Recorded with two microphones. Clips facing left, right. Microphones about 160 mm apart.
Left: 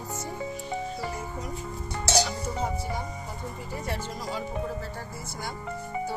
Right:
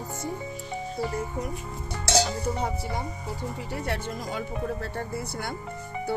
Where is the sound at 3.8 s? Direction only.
60° right (ahead or behind).